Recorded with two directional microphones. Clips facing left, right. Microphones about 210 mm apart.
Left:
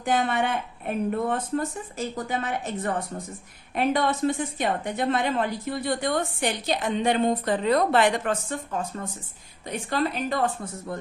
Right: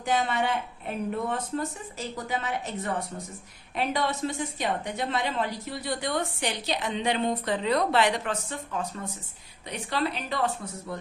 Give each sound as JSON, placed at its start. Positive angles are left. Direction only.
{"t": 0.0, "sound": "a woman's voice", "side_deg": 55}